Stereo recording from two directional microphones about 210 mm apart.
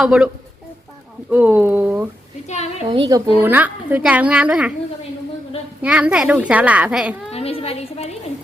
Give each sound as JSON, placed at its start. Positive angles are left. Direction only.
{"t": 0.0, "sound": "a child's voice", "side_deg": -5}
{"t": 1.3, "sound": "a woman's voice", "side_deg": -10}
{"t": 2.5, "sound": "a woman's voice", "side_deg": 30}
{"t": 2.9, "sound": "a woman's voice", "side_deg": -20}
{"t": 5.8, "sound": "a child's voice", "side_deg": -5}
{"t": 7.3, "sound": "a sound", "side_deg": 30}